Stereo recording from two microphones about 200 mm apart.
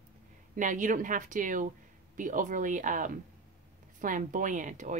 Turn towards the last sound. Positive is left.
turn(degrees=-40)  # may be behind; listen again after turning